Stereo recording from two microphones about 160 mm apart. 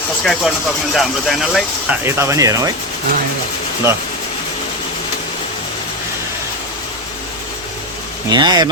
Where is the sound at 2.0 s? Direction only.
15° right (ahead or behind).